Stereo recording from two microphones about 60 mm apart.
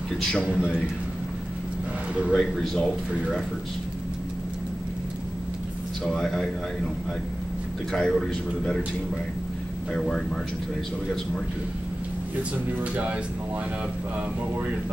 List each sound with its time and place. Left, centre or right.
0.5 s a man's voice: centre
2.3 s speech: centre
6.0 s speech: centre
7.9 s speech: centre
9.9 s speech: centre
12.9 s speech: right